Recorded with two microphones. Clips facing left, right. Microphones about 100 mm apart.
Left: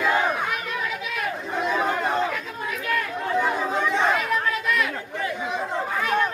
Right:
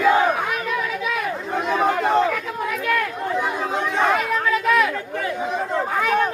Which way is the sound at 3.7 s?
60° right (ahead or behind).